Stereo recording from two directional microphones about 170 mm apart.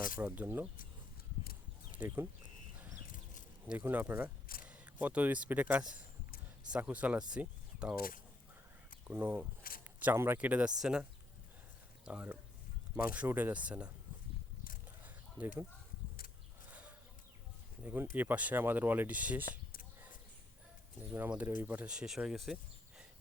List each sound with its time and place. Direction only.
0.2 s speech: 10° right (ahead or behind)
1.9 s a sound: 10° right (ahead or behind)
2.7 s livestock: 10° right (ahead or behind)
3.7 s speech: 10° right (ahead or behind)
7.9 s speech: 60° left (ahead or behind)
9.0 s speech: 10° right (ahead or behind)
12.0 s speech: 10° right (ahead or behind)
15.4 s speech: 10° right (ahead or behind)
17.8 s speech: 10° right (ahead or behind)
21.1 s speech: 10° right (ahead or behind)